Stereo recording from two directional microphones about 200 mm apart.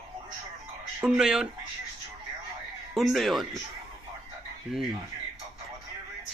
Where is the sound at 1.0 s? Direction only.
5° right (ahead or behind).